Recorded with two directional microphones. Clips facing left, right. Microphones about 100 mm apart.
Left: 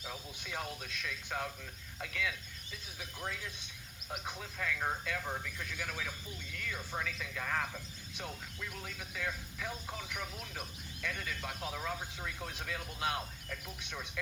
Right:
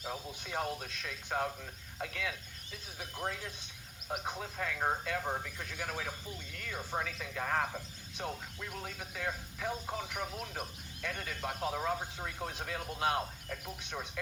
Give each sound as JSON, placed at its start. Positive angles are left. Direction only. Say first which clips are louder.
{"t": 0.0, "sound": "speech", "louder": "right 4 dB", "side_deg": -35}